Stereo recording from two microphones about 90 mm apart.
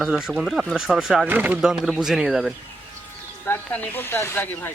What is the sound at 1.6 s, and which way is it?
Speech, 5° right (ahead or behind).